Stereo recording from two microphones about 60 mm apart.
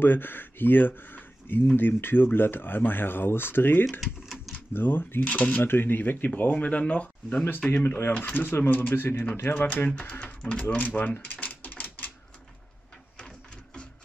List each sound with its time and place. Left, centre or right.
0.0 s speech: left
4.0 s a sound: centre
4.7 s speech: left
7.8 s speech: left
9.8 s speech: centre